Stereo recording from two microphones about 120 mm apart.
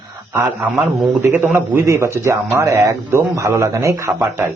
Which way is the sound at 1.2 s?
15° right (ahead or behind).